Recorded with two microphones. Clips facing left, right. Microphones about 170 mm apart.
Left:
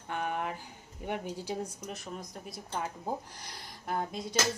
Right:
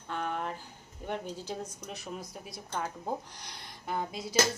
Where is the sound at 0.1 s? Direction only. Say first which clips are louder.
Left 1 dB; 10° left (ahead or behind).